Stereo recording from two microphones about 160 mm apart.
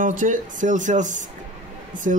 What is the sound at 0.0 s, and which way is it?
Speech, 55° right (ahead or behind).